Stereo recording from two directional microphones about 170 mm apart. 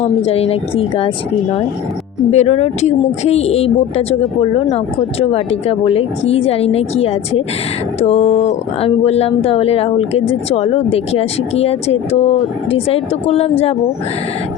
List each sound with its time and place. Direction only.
0.0 s speech: 40° left (ahead or behind)
2.3 s speech: 40° left (ahead or behind)